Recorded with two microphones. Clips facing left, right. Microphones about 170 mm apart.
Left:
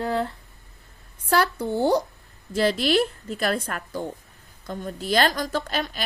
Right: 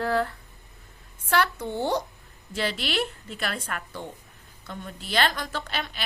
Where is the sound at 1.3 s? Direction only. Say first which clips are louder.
Left 3 dB; 35° left (ahead or behind).